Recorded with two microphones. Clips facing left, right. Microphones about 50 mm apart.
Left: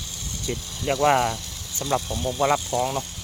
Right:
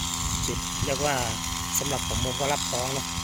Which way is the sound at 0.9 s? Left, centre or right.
Left.